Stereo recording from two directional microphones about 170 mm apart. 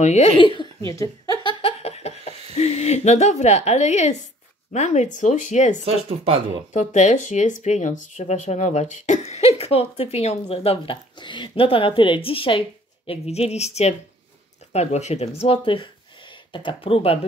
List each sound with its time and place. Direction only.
0.0 s a woman's voice: 40° left (ahead or behind)
0.8 s speech: 20° left (ahead or behind)
1.4 s laughter: 30° left (ahead or behind)
4.7 s speech: 45° left (ahead or behind)
5.9 s speech: 35° right (ahead or behind)
6.7 s a woman's voice: 45° left (ahead or behind)